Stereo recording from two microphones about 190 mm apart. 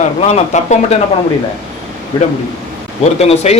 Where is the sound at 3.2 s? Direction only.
35° left (ahead or behind).